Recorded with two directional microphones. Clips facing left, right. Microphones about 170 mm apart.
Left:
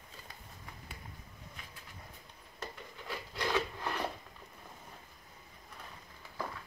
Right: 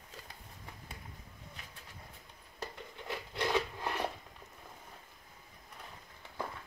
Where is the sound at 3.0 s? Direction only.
20° right (ahead or behind).